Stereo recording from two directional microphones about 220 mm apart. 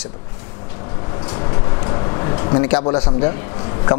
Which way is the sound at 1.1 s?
25° left (ahead or behind).